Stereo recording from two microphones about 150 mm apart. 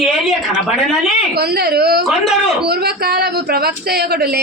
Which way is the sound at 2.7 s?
90° right.